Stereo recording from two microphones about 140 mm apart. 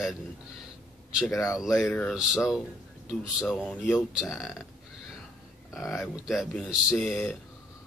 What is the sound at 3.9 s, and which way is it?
Speech, 5° right (ahead or behind).